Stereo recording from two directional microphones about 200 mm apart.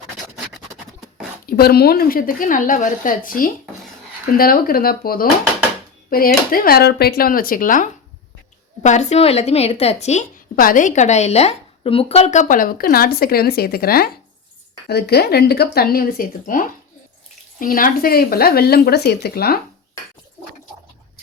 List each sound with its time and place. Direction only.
1.5 s a woman's voice: 50° left (ahead or behind)